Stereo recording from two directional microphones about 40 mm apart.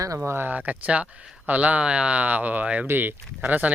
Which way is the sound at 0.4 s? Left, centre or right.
Right.